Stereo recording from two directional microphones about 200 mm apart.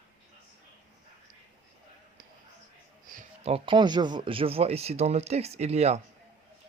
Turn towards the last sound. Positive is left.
turn(degrees=-30)  # may be behind; listen again after turning